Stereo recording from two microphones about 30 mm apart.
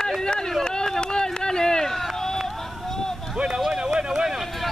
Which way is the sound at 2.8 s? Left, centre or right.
Centre.